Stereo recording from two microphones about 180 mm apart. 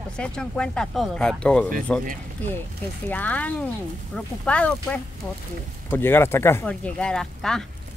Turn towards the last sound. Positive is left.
turn(degrees=5)  # may be behind; listen again after turning